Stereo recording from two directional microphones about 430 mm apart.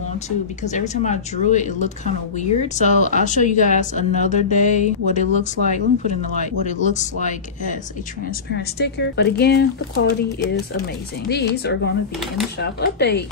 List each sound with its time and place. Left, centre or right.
0.7 s speech: centre
11.2 s speech: left